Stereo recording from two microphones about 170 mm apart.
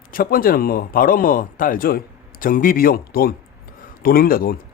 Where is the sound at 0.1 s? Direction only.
60° left (ahead or behind).